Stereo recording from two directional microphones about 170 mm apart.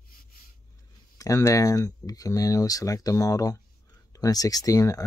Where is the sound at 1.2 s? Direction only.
20° left (ahead or behind).